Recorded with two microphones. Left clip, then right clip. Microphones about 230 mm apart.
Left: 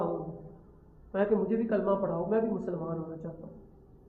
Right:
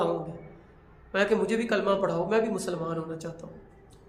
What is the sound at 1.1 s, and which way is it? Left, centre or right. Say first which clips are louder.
A man's voice: right 3 dB; right.